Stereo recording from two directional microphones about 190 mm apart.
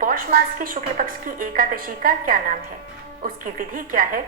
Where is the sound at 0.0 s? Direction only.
45° right (ahead or behind).